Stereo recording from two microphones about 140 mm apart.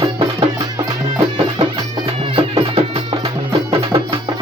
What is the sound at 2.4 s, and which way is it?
Music, 40° right (ahead or behind).